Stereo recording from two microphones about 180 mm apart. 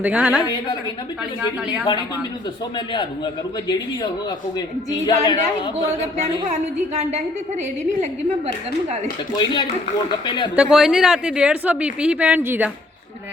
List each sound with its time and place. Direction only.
0.0 s a woman's voice: 10° right (ahead or behind)
2.7 s a woman's voice: 25° left (ahead or behind)
5.0 s a woman's voice: 25° left (ahead or behind)
5.7 s a woman's voice: 40° right (ahead or behind)
9.3 s a woman's voice: 25° left (ahead or behind)
10.5 s a woman's voice: 5° right (ahead or behind)